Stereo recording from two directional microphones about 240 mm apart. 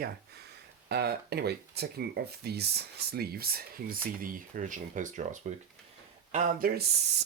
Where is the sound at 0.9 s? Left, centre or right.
Right.